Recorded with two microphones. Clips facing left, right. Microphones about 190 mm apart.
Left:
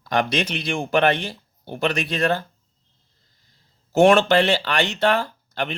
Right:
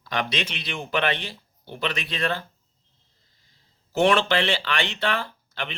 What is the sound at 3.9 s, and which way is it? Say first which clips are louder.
Speech: left 6 dB; 45° left (ahead or behind).